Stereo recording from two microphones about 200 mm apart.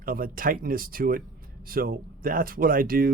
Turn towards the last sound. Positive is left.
turn(degrees=-45)  # may be behind; listen again after turning